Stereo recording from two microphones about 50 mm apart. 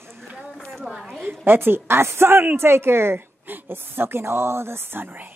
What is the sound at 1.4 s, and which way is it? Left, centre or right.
Speech, right.